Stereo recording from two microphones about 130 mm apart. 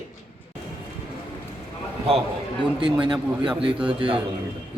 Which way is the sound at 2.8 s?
40° right (ahead or behind).